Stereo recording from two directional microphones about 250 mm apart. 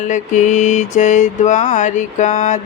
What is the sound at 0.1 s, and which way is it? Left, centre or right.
Mantra, left.